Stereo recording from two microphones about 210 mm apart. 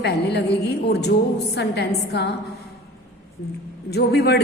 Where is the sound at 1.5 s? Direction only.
50° left (ahead or behind).